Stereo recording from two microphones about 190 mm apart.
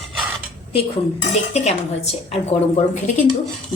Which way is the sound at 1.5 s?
35° left (ahead or behind).